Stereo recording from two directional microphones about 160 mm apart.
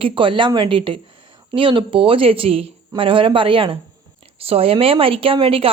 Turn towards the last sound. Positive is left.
turn(degrees=-35)  # may be behind; listen again after turning